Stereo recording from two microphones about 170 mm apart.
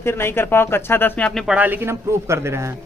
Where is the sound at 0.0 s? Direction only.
15° left (ahead or behind).